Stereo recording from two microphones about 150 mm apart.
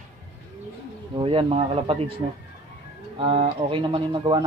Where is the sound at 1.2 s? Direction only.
40° right (ahead or behind).